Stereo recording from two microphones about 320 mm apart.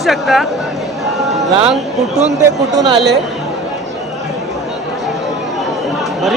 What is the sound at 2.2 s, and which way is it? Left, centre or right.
Speech, right.